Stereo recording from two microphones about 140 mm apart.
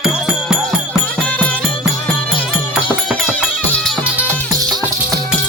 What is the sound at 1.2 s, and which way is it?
Music, 10° left (ahead or behind).